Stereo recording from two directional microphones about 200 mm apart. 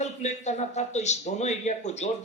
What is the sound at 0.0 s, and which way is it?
A man's voice, 35° left (ahead or behind).